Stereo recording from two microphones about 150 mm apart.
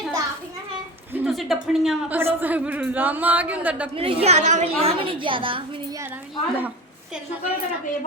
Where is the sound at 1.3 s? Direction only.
Centre (ahead or behind).